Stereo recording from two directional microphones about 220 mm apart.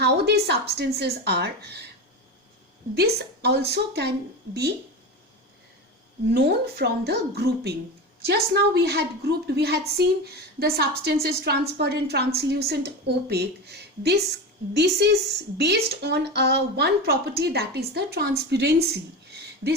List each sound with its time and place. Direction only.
0.0 s speech: 45° right (ahead or behind)
2.9 s speech: 45° right (ahead or behind)
6.3 s speech: 45° right (ahead or behind)